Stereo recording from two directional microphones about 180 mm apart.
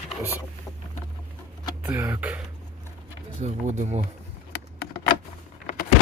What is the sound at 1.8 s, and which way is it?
Speech, 10° right (ahead or behind).